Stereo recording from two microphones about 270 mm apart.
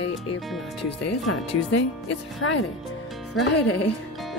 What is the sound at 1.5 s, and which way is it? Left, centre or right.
Speech, left.